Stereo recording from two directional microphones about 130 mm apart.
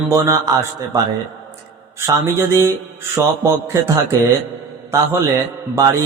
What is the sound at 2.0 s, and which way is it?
Speech, 20° right (ahead or behind).